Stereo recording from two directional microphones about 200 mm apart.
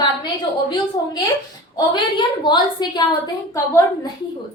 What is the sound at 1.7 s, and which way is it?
A woman's voice, 20° left (ahead or behind).